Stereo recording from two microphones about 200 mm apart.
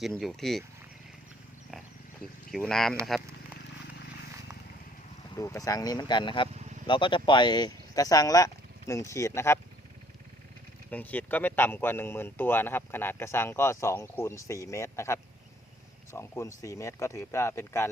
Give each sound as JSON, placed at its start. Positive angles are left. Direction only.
{"t": 0.0, "sound": "speech", "side_deg": 0}
{"t": 2.5, "sound": "speech", "side_deg": 0}
{"t": 5.3, "sound": "speech", "side_deg": 15}
{"t": 10.9, "sound": "speech", "side_deg": 10}